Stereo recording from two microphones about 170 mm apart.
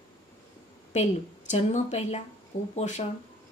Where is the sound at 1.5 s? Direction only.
45° left (ahead or behind).